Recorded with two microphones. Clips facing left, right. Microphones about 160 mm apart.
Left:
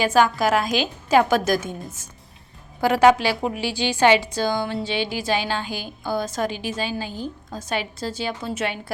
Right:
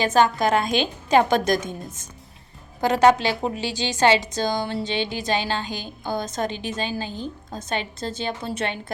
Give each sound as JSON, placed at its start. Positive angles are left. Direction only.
{"t": 0.0, "sound": "a woman's voice", "side_deg": 5}
{"t": 2.9, "sound": "a woman's voice", "side_deg": 10}
{"t": 6.0, "sound": "a woman's voice", "side_deg": -20}
{"t": 6.2, "sound": "a woman's voice", "side_deg": 10}